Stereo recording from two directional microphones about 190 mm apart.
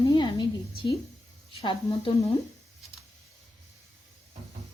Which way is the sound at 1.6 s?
25° left (ahead or behind).